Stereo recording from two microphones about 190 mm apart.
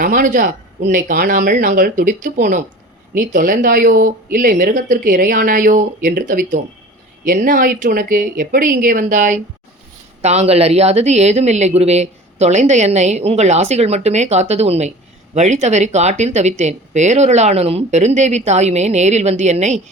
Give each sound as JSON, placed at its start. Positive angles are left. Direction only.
{"t": 0.0, "sound": "speech", "side_deg": -45}